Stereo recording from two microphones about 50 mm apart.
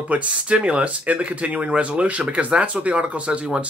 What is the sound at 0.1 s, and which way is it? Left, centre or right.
Speech, right.